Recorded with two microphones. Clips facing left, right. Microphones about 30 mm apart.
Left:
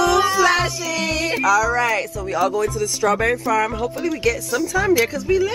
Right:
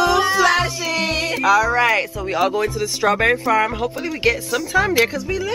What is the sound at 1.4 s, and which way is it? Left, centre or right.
Speech, right.